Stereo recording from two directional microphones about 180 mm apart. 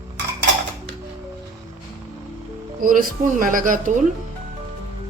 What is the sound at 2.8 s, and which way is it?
A woman's voice, 50° right (ahead or behind).